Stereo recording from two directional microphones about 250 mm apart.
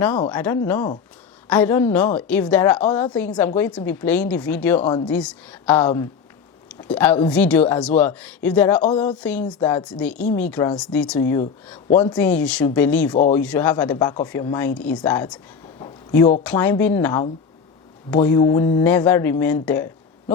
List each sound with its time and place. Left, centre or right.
0.3 s a woman's voice: centre
4.8 s a woman's voice: centre
5.0 s a woman's voice: centre
15.8 s a sound: centre
16.4 s a woman's voice: centre
19.6 s a sound: centre